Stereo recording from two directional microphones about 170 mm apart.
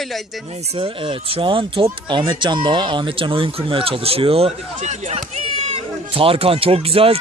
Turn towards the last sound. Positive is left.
turn(degrees=-35)  # may be behind; listen again after turning